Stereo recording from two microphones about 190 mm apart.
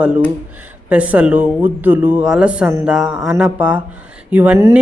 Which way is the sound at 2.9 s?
5° right (ahead or behind).